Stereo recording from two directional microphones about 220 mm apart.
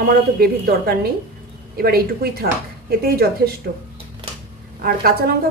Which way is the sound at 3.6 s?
45° right (ahead or behind).